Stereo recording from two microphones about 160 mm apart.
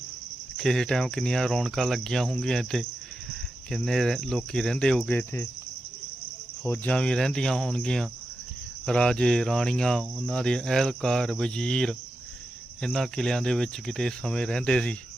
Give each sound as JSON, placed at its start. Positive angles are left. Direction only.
{"t": 0.5, "sound": "cricket", "side_deg": 5}
{"t": 6.7, "sound": "cricket", "side_deg": 10}